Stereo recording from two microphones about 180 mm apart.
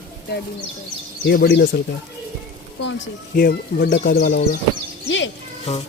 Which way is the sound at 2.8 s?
90° left.